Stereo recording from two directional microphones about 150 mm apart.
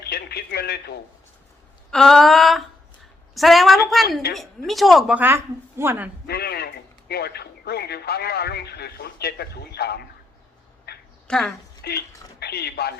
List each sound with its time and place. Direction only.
0.0 s radio: 90° left
1.9 s a sound: 5° left (ahead or behind)
4.4 s speech: centre (ahead or behind); by 6.1 s 15° right (ahead or behind)
6.2 s speech: 90° left
10.9 s quack: 90° left
11.3 s a sound: 5° left (ahead or behind)
11.8 s speech: 90° left